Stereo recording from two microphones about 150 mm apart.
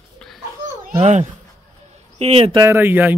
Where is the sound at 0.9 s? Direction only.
45° right (ahead or behind).